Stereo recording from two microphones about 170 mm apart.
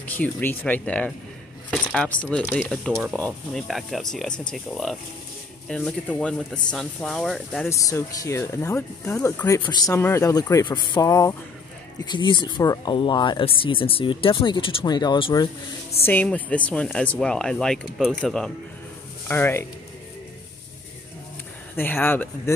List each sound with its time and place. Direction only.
0.0 s speech: 10° left (ahead or behind)
7.7 s speech: 20° left (ahead or behind)
16.1 s speech: 10° left (ahead or behind)
21.7 s speech: 10° left (ahead or behind)